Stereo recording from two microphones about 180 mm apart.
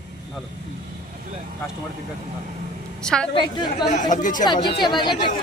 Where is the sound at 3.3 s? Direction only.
25° left (ahead or behind).